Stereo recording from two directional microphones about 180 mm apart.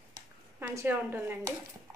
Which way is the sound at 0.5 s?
10° right (ahead or behind).